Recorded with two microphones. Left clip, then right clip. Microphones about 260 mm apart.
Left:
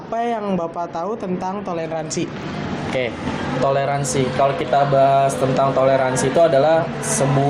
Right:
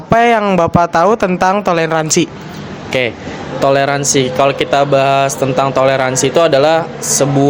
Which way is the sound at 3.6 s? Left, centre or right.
Right.